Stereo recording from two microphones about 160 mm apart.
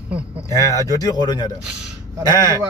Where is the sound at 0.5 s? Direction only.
20° left (ahead or behind).